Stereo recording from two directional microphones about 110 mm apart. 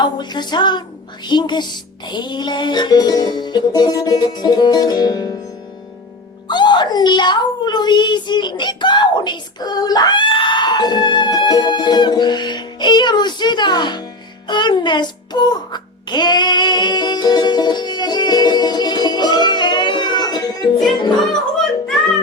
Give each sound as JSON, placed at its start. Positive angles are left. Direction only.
{"t": 0.0, "sound": "music", "side_deg": 40}
{"t": 6.5, "sound": "a child's voice", "side_deg": 45}